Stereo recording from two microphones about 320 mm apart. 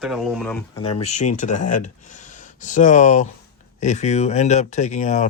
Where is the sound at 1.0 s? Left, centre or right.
Left.